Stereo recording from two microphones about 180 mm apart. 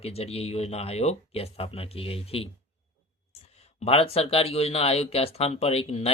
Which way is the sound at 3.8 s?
35° left (ahead or behind).